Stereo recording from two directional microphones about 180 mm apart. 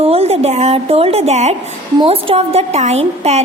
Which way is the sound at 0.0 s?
35° right (ahead or behind).